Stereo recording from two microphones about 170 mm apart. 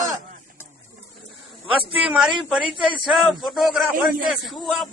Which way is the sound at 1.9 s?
5° right (ahead or behind).